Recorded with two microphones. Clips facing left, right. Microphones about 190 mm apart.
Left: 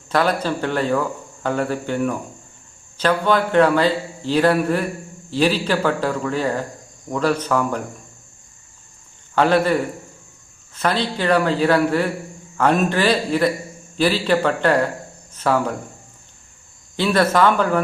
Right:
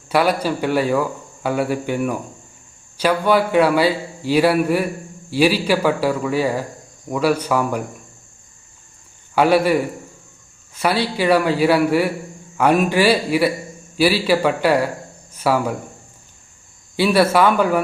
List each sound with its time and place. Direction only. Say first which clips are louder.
0.1 s a man's voice: right 2 dB; 10° right (ahead or behind)
9.3 s a man's voice: right 2 dB; 10° right (ahead or behind)
10.8 s a man's voice: right 2 dB; 10° right (ahead or behind)
17.0 s a man's voice: right 2 dB; 10° right (ahead or behind)